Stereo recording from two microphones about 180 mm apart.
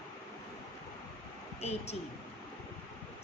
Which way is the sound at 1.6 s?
35° left (ahead or behind).